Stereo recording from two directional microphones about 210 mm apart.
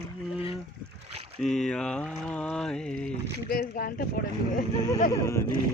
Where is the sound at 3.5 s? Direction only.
45° left (ahead or behind).